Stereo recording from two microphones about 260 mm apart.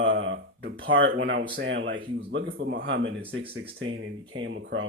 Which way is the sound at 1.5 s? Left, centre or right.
Right.